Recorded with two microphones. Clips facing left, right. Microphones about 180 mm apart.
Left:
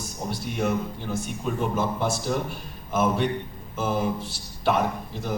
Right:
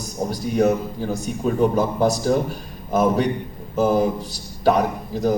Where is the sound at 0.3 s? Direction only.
40° right (ahead or behind).